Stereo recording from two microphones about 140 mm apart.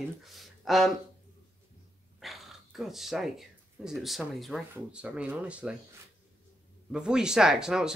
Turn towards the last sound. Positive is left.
turn(degrees=-5)  # may be behind; listen again after turning